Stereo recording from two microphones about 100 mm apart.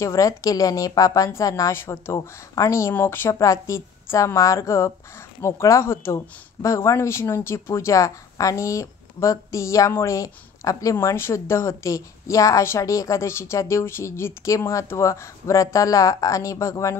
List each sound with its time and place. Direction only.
0.0 s speech: 35° left (ahead or behind)
2.1 s speech: 35° left (ahead or behind)